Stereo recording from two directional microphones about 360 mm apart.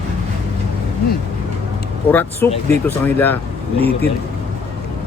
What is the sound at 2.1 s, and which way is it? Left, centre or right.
Speech, centre.